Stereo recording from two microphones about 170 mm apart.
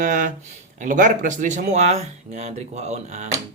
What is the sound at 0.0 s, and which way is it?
Speech, 50° right (ahead or behind).